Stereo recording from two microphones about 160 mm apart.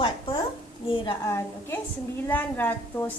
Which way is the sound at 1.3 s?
15° left (ahead or behind).